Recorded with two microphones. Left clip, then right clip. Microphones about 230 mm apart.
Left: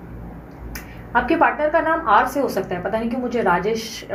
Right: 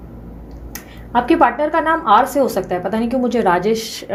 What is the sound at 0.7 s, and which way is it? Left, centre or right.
Speech, right.